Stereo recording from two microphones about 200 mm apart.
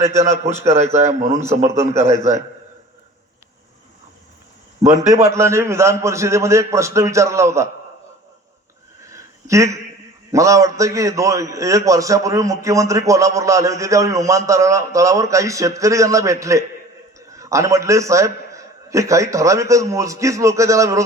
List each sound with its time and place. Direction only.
0.0 s a man's voice: 15° right (ahead or behind)
0.3 s a man's voice: 35° right (ahead or behind)
1.7 s a man's voice: 15° right (ahead or behind)
4.8 s a man's voice: 30° right (ahead or behind)
5.1 s a man's voice: 15° right (ahead or behind)
9.0 s a sound: 15° right (ahead or behind)
10.3 s a man's voice: 15° right (ahead or behind)